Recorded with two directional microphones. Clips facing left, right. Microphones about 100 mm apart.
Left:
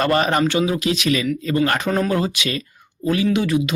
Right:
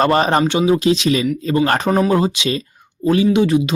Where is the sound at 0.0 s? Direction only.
30° right (ahead or behind).